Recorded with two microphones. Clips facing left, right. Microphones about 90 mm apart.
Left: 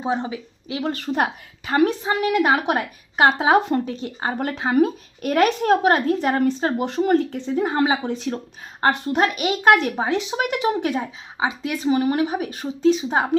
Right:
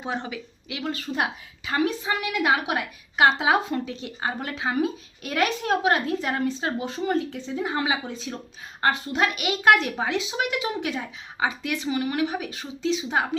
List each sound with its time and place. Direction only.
0.0 s speech: 30° left (ahead or behind)
0.9 s a woman's voice: 50° left (ahead or behind)
8.0 s a woman's voice: 60° left (ahead or behind); by 13.3 s 35° left (ahead or behind)